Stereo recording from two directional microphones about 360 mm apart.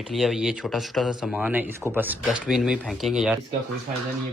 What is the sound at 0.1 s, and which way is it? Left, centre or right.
Speech, centre.